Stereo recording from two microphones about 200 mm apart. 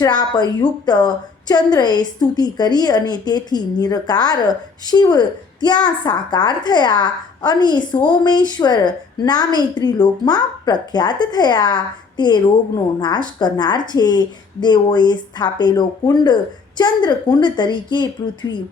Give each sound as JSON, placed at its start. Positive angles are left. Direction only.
{"t": 0.0, "sound": "a woman's voice", "side_deg": 20}